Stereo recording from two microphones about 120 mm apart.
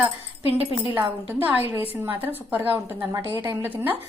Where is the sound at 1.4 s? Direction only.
15° right (ahead or behind).